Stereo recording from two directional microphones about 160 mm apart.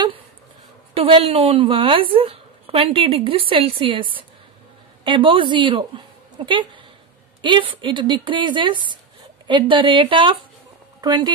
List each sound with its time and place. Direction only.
0.9 s a woman's voice: 35° right (ahead or behind)